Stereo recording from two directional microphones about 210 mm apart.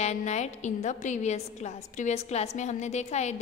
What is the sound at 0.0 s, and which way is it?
A woman's voice, 35° left (ahead or behind).